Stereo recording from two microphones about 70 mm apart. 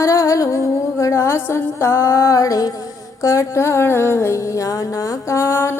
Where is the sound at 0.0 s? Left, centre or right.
Left.